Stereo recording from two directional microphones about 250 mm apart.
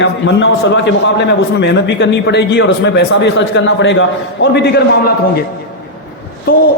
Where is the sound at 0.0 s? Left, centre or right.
Left.